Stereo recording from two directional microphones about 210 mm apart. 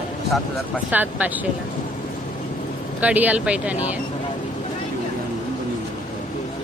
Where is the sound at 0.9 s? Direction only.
10° right (ahead or behind).